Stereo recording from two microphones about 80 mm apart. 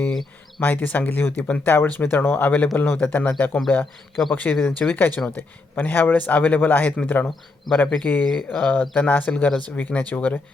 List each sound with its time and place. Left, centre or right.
0.6 s a man's voice: left
4.2 s speech: centre
4.8 s a man's voice: left
7.3 s speech: centre
7.9 s a man's voice: left